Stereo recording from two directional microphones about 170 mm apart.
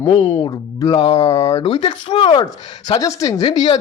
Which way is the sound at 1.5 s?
35° left (ahead or behind).